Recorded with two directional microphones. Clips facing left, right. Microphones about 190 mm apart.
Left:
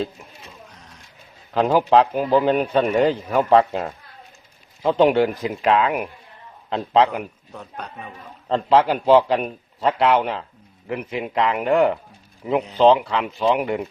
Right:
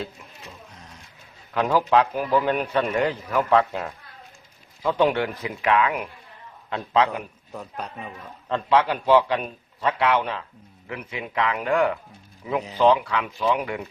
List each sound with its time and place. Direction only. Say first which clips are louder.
1.5 s a man's voice: left 4 dB; 30° left (ahead or behind)
7.5 s a man's voice: right 4 dB; 5° right (ahead or behind)
8.4 s a man's voice: left 4 dB; 30° left (ahead or behind)